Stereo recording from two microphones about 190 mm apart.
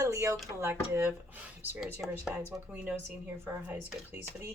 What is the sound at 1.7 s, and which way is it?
Speech, centre (ahead or behind).